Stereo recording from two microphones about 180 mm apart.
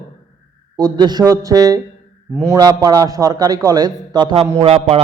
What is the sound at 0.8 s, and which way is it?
A man's voice, 25° right (ahead or behind).